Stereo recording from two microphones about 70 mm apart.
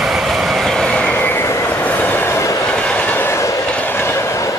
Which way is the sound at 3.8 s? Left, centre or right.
Left.